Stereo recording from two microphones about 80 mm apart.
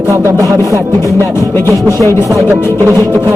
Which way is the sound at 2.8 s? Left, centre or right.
Right.